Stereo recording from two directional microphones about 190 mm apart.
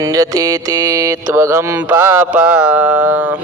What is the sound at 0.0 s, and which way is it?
Speech, 20° right (ahead or behind).